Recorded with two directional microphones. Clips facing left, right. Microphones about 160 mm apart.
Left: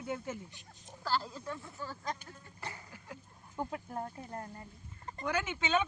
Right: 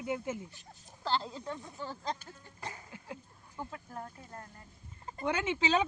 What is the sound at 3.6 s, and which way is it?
Speech, 20° left (ahead or behind).